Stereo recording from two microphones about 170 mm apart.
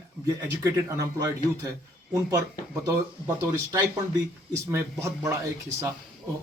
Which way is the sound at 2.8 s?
15° right (ahead or behind).